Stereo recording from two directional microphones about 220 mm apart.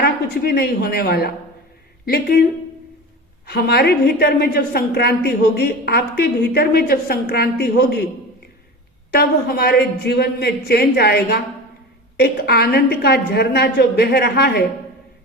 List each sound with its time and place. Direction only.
0.0 s a woman's voice: 45° left (ahead or behind)
3.4 s a woman's voice: 45° left (ahead or behind)
9.1 s a woman's voice: 45° left (ahead or behind)